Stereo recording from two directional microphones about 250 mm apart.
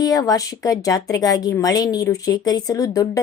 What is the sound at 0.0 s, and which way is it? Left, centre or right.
Speech, centre.